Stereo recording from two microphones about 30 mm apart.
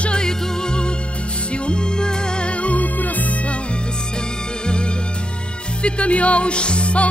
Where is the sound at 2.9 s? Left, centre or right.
Left.